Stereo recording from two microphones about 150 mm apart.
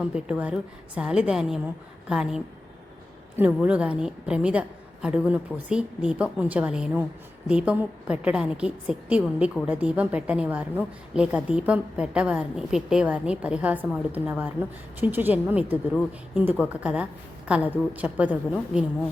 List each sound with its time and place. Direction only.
0.0 s a woman's voice: 5° right (ahead or behind)